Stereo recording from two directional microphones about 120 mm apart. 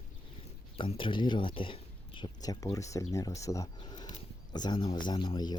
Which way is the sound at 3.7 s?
35° left (ahead or behind).